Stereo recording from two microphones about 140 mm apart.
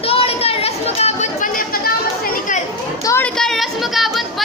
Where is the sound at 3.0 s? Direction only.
20° left (ahead or behind).